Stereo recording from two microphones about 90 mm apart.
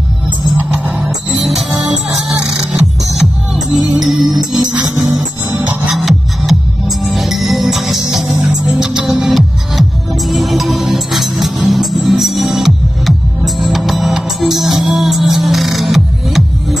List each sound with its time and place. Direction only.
0.6 s music: 20° right (ahead or behind)
2.7 s music: 5° right (ahead or behind)
5.6 s music: 15° right (ahead or behind)
5.9 s music: centre (ahead or behind)